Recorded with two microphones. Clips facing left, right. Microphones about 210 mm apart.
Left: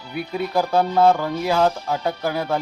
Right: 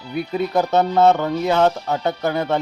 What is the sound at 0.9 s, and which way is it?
Speech, 5° right (ahead or behind).